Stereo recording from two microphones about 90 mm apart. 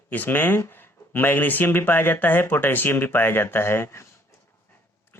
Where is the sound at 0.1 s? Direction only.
20° left (ahead or behind).